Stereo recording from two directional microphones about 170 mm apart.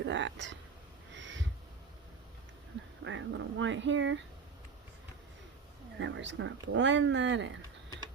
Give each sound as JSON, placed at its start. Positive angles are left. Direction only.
{"t": 0.0, "sound": "speech", "side_deg": -90}
{"t": 1.1, "sound": "owl", "side_deg": -90}
{"t": 3.0, "sound": "speech", "side_deg": -90}
{"t": 6.0, "sound": "speech", "side_deg": -90}